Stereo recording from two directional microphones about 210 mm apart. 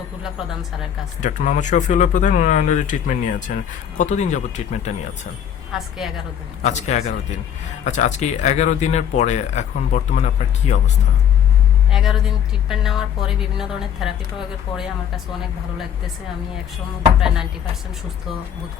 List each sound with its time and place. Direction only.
1.2 s speech: 35° left (ahead or behind)
5.7 s a woman's voice: centre (ahead or behind)
6.6 s speech: 35° left (ahead or behind)
11.9 s a woman's voice: centre (ahead or behind)
17.2 s a woman's voice: 5° right (ahead or behind)